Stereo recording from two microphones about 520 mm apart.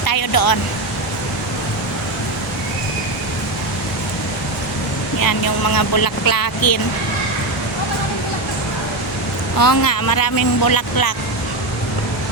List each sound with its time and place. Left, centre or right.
0.0 s a sound: left
5.2 s speech: left
9.6 s speech: left